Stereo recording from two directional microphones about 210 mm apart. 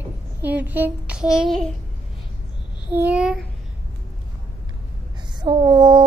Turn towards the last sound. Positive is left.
turn(degrees=-20)  # may be behind; listen again after turning